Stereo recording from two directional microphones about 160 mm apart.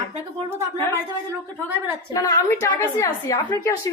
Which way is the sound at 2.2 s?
20° left (ahead or behind).